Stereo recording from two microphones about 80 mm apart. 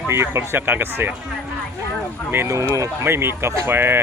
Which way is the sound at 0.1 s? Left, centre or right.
Right.